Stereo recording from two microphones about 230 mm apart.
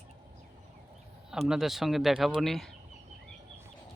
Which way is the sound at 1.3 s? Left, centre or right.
Centre.